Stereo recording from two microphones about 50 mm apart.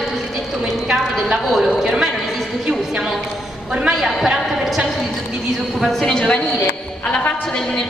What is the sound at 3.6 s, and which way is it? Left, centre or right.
Speech, centre.